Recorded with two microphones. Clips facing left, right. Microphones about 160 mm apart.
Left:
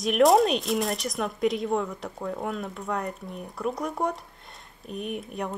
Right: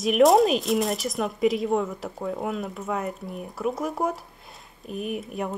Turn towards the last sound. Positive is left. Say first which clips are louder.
# right 2 dB
turn(degrees=-5)  # may be behind; listen again after turning